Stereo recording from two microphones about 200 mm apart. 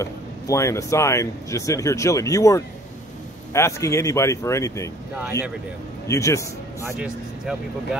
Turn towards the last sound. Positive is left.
turn(degrees=-5)  # may be behind; listen again after turning